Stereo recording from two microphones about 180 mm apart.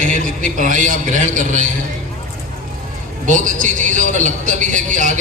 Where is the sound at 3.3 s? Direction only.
45° right (ahead or behind).